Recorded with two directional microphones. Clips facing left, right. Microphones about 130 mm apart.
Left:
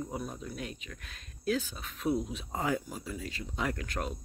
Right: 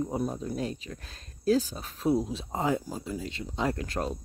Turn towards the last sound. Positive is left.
turn(degrees=-30)  # may be behind; listen again after turning